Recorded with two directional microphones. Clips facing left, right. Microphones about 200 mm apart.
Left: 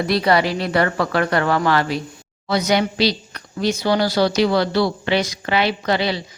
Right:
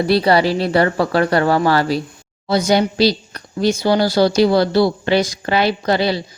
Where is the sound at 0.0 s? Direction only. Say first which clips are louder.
Right 3 dB; 30° right (ahead or behind).